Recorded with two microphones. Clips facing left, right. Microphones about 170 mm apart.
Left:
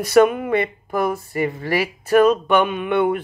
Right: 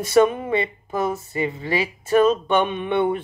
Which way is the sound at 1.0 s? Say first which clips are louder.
Left 2 dB; 25° right (ahead or behind).